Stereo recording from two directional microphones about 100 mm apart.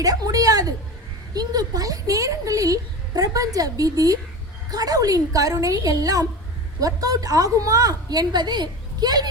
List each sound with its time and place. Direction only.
0.0 s speech: 40° right (ahead or behind)